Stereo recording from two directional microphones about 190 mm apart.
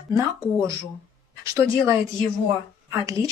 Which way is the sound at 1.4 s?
15° right (ahead or behind).